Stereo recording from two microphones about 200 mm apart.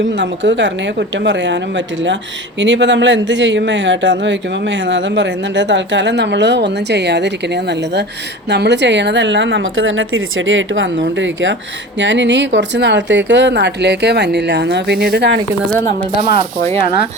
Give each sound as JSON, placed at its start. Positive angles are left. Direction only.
{"t": 0.0, "sound": "a woman's voice", "side_deg": -65}